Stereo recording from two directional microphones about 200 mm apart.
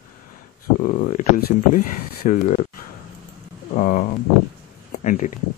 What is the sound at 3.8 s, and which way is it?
Speech, 45° left (ahead or behind).